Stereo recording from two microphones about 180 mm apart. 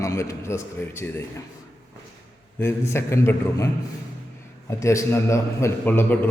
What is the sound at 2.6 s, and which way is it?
A man's voice, 15° left (ahead or behind).